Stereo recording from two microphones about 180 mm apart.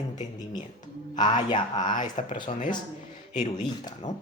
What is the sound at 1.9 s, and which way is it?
Speech, 40° left (ahead or behind).